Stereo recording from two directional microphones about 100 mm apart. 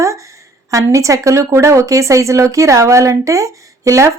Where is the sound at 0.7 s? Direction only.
30° right (ahead or behind).